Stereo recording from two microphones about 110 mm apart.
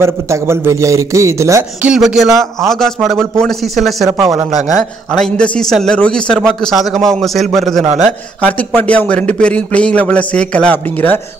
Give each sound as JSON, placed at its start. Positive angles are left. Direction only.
{"t": 0.0, "sound": "a man's voice", "side_deg": -25}
{"t": 1.8, "sound": "speech", "side_deg": -5}
{"t": 8.4, "sound": "a man's voice", "side_deg": 15}